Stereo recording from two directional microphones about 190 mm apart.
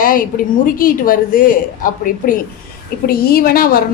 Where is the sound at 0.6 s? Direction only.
45° left (ahead or behind).